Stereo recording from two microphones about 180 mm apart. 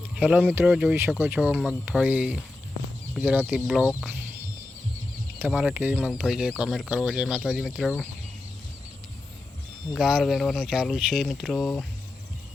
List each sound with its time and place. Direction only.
0.2 s speech: 10° right (ahead or behind)
5.4 s speech: 10° right (ahead or behind)
9.9 s speech: 5° right (ahead or behind)